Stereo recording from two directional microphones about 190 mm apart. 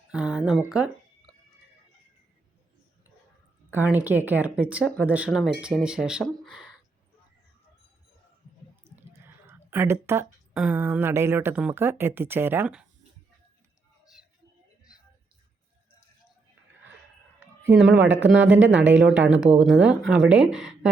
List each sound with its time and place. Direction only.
0.1 s speech: 5° right (ahead or behind)
3.7 s speech: 10° right (ahead or behind)
8.9 s a sound: 35° right (ahead or behind)
9.2 s speech: 15° right (ahead or behind)
17.7 s speech: 5° right (ahead or behind)